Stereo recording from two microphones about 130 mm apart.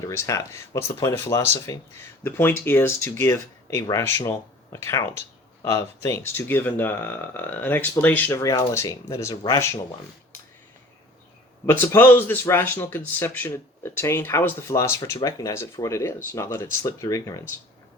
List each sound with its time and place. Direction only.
0.0 s speech: 25° left (ahead or behind)
11.6 s speech: 15° left (ahead or behind)